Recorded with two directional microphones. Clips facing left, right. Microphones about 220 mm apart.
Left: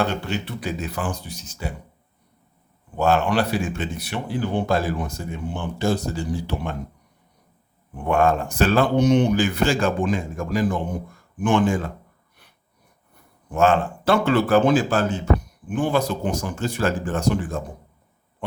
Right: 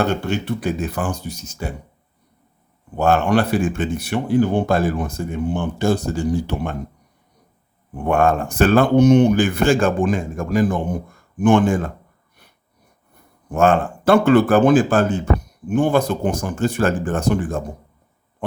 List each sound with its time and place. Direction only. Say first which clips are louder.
0.0 s speech: right 4 dB; 45° right (ahead or behind)
3.0 s speech: right 3 dB; 50° right (ahead or behind)
8.0 s speech: right 2 dB; 55° right (ahead or behind)
13.5 s speech: right 3 dB; 50° right (ahead or behind)